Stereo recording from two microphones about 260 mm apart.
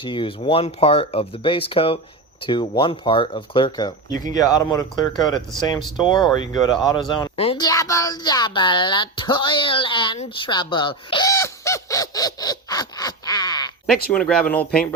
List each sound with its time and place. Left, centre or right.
0.0 s speech: centre
14.1 s speech: centre